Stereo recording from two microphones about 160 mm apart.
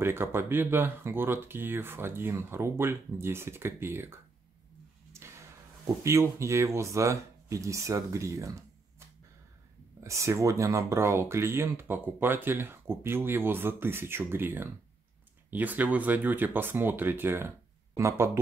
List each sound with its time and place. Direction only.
0.0 s speech: 15° right (ahead or behind)
6.0 s speech: 20° right (ahead or behind)
9.9 s speech: 20° right (ahead or behind)